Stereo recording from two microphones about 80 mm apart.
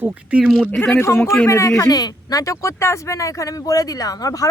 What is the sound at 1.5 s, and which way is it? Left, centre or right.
Speech, left.